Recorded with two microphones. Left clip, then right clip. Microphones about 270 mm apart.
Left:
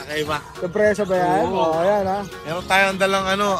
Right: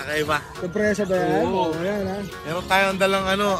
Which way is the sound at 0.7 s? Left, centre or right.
Left.